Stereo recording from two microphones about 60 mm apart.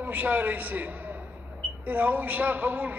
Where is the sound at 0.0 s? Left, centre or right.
Right.